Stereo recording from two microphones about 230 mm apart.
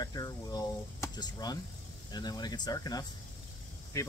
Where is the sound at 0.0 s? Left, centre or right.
Centre.